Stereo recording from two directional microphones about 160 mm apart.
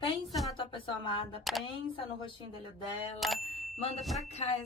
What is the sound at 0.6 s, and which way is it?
Speech, 35° left (ahead or behind).